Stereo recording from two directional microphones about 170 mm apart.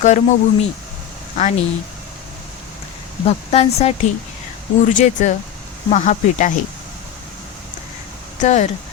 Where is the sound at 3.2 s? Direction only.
40° left (ahead or behind).